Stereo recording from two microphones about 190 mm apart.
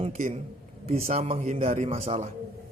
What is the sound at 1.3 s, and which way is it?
Speech, 45° right (ahead or behind).